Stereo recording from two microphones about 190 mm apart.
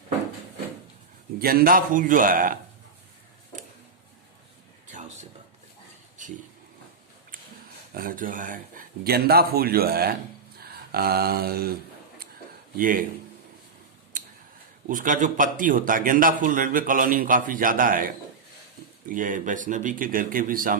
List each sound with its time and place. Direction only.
1.4 s a man's voice: 50° right (ahead or behind)
4.9 s a sound: 40° right (ahead or behind)
7.9 s a man's voice: 45° right (ahead or behind)
10.6 s a sound: 55° right (ahead or behind)
12.7 s a man's voice: 45° right (ahead or behind)
14.8 s a man's voice: 45° right (ahead or behind)